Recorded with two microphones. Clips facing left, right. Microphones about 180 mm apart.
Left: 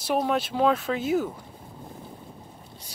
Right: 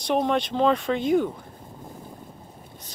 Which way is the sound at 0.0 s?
5° left (ahead or behind).